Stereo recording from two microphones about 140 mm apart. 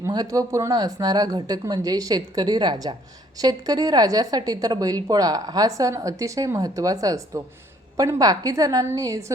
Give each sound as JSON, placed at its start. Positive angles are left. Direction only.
{"t": 0.0, "sound": "a woman's voice", "side_deg": -25}